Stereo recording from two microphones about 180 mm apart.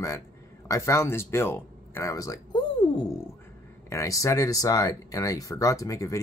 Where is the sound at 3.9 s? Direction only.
15° left (ahead or behind).